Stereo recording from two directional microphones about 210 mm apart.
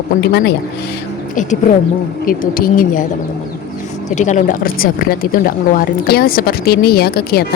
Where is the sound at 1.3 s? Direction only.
35° left (ahead or behind).